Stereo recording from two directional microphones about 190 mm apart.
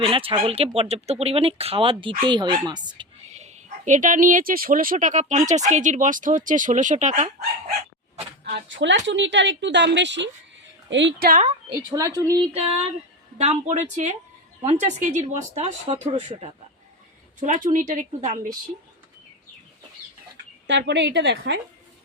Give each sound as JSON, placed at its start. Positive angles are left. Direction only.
{"t": 0.0, "sound": "speech", "side_deg": -30}
{"t": 3.2, "sound": "speech", "side_deg": -35}
{"t": 8.4, "sound": "a woman's voice", "side_deg": -65}
{"t": 11.2, "sound": "a woman's voice", "side_deg": -45}
{"t": 11.9, "sound": "speech", "side_deg": -20}
{"t": 17.4, "sound": "speech", "side_deg": -45}
{"t": 20.7, "sound": "a woman's voice", "side_deg": -70}